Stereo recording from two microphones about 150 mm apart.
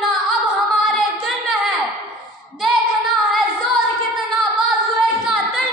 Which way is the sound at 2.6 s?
Centre (ahead or behind).